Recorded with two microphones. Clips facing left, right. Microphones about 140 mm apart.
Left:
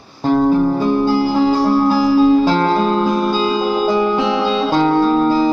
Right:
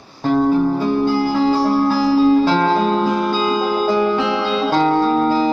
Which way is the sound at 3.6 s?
10° left (ahead or behind).